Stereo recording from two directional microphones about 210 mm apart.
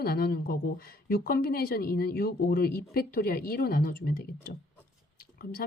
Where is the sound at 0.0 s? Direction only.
45° left (ahead or behind).